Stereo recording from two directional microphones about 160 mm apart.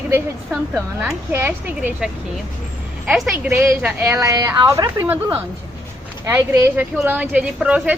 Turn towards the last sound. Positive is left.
turn(degrees=-10)  # may be behind; listen again after turning